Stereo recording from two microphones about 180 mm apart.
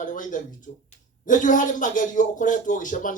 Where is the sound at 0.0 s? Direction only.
45° left (ahead or behind).